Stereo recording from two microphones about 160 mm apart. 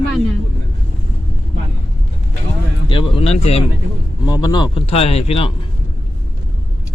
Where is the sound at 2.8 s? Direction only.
35° left (ahead or behind).